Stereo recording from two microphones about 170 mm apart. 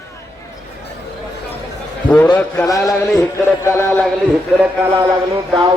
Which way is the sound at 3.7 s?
15° left (ahead or behind).